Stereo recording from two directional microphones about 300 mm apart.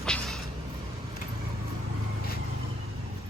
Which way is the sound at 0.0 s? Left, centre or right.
Centre.